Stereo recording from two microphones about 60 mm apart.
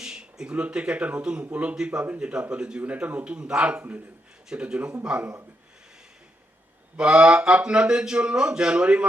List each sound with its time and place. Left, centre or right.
0.0 s speech: centre
6.9 s speech: centre